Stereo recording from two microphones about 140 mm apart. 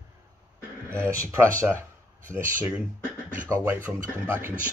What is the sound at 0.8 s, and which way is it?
Speech, 20° right (ahead or behind).